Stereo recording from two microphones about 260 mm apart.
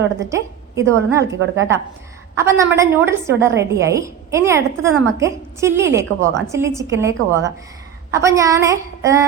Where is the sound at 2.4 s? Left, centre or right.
Centre.